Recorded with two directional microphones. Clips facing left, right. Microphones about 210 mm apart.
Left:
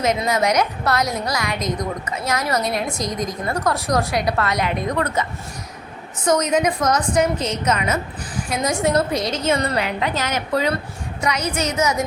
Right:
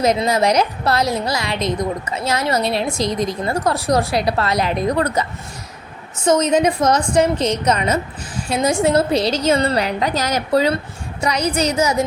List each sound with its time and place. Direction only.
0.0 s a woman's voice: 35° right (ahead or behind)
6.2 s a woman's voice: 25° right (ahead or behind)